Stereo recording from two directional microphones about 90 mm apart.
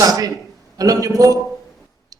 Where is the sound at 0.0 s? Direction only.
40° right (ahead or behind).